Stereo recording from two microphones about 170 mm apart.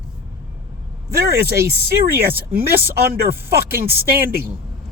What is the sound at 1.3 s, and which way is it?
Speech, 65° right (ahead or behind).